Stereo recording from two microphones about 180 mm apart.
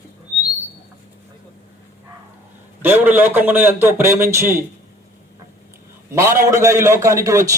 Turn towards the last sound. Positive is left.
turn(degrees=-15)  # may be behind; listen again after turning